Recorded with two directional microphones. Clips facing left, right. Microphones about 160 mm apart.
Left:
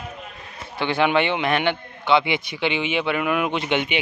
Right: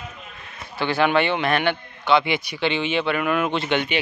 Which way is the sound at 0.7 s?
20° left (ahead or behind).